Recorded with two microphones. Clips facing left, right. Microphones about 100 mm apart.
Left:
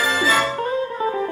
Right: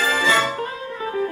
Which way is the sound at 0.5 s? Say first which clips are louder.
Left 5 dB; 30° left (ahead or behind).